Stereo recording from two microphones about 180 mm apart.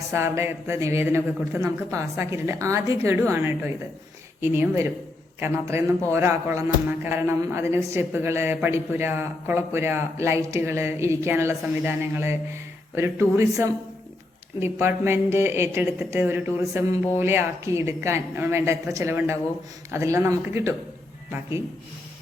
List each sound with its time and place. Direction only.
0.1 s a woman's voice: 15° right (ahead or behind)